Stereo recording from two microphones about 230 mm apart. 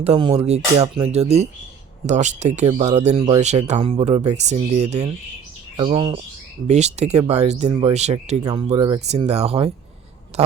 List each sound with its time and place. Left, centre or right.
0.0 s speech: right